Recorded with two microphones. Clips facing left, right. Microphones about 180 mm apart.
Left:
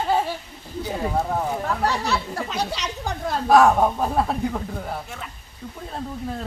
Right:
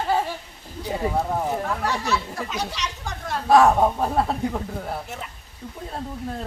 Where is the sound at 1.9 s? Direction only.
65° left (ahead or behind).